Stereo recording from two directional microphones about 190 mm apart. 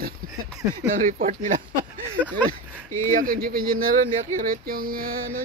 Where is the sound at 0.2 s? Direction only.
50° right (ahead or behind).